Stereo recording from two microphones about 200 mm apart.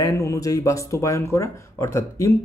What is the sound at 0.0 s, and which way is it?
Speech, 15° left (ahead or behind).